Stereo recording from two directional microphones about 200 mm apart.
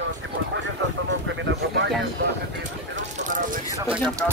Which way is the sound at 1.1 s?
65° right (ahead or behind).